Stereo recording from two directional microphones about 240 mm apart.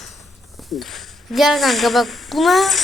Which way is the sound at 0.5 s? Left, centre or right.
Centre.